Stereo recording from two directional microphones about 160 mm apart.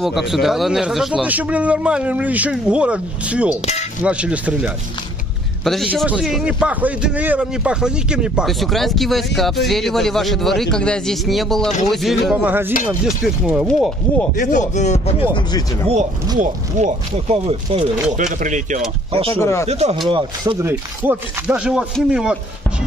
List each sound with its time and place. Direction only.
0.0 s a man's voice: centre (ahead or behind)
14.3 s speech: 55° left (ahead or behind)
16.3 s speech: 50° right (ahead or behind)
17.3 s speech: 35° right (ahead or behind)
18.4 s speech: 50° right (ahead or behind)
19.3 s speech: 15° left (ahead or behind)
19.7 s speech: 45° right (ahead or behind)
20.1 s speech: 30° right (ahead or behind)
20.6 s speech: 10° right (ahead or behind)